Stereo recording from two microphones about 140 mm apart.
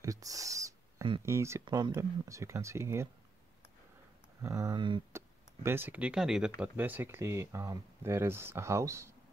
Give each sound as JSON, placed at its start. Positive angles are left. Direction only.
{"t": 0.0, "sound": "owl", "side_deg": -25}
{"t": 1.2, "sound": "speech", "side_deg": -20}
{"t": 1.6, "sound": "speech", "side_deg": -30}
{"t": 4.4, "sound": "speech", "side_deg": -20}
{"t": 4.7, "sound": "speech", "side_deg": -35}
{"t": 5.1, "sound": "speech", "side_deg": -15}